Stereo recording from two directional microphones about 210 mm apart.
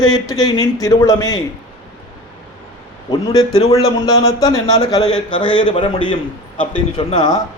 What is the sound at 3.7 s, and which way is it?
A man's voice, 15° left (ahead or behind).